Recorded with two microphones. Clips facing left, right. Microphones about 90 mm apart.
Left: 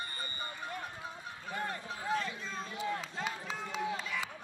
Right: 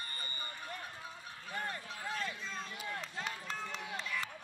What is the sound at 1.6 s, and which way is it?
Run, 25° left (ahead or behind).